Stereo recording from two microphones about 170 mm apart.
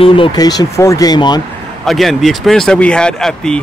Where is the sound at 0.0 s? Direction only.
30° left (ahead or behind).